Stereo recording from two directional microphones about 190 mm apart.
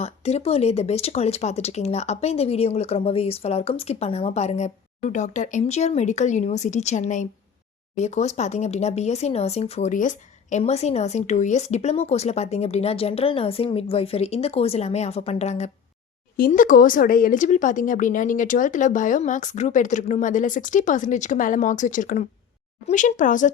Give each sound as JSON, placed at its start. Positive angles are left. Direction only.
{"t": 0.0, "sound": "speech", "side_deg": 35}
{"t": 16.4, "sound": "speech", "side_deg": 45}